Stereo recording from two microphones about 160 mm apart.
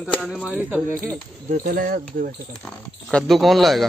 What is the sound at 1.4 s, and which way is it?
Speech, 55° right (ahead or behind).